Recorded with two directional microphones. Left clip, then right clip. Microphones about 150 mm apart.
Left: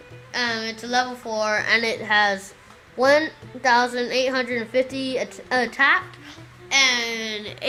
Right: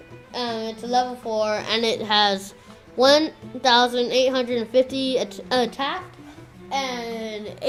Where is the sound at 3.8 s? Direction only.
15° right (ahead or behind).